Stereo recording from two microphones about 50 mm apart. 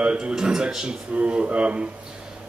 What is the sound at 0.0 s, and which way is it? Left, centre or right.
Speech, right.